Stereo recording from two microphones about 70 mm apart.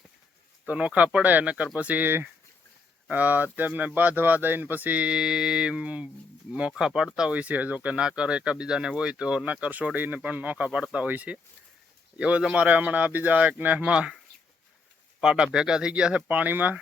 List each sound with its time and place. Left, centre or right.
0.7 s speech: centre
7.3 s speech: right
12.2 s speech: centre
15.2 s speech: centre; by 16.7 s right